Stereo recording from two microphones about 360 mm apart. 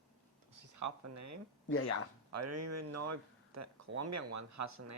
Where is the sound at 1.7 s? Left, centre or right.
Left.